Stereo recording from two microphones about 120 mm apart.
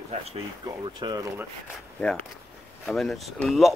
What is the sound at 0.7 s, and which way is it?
Speech, 35° right (ahead or behind).